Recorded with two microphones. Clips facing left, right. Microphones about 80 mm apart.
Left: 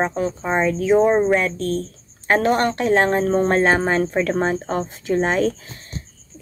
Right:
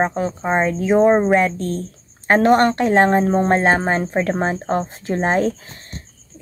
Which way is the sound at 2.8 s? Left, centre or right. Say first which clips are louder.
Right 3 dB; right.